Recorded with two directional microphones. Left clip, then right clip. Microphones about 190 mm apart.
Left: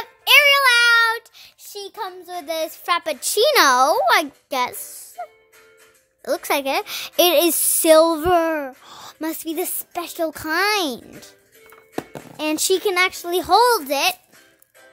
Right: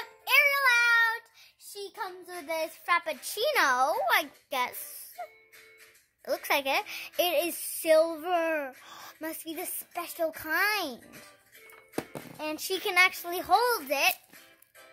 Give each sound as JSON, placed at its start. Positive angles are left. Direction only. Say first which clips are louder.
{"t": 0.0, "sound": "child singing", "louder": "left 10 dB", "side_deg": 70}
{"t": 6.2, "sound": "speech", "louder": "left 7 dB", "side_deg": 45}
{"t": 11.9, "sound": "a sound", "louder": "left 6 dB", "side_deg": -5}
{"t": 12.4, "sound": "speech", "louder": "left 13 dB", "side_deg": 60}